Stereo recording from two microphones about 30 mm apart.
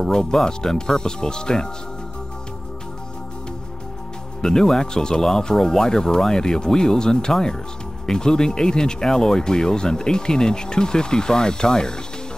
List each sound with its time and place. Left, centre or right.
0.0 s speech: left
4.4 s speech: centre